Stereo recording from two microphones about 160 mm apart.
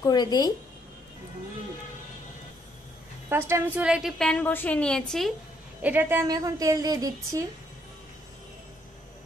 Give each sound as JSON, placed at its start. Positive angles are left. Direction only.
{"t": 0.0, "sound": "speech", "side_deg": 25}
{"t": 3.3, "sound": "a woman's voice", "side_deg": -15}
{"t": 3.8, "sound": "a woman's voice", "side_deg": -5}
{"t": 5.8, "sound": "a woman's voice", "side_deg": -10}